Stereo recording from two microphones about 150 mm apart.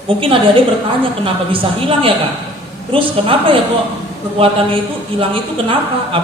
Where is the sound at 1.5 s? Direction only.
35° right (ahead or behind).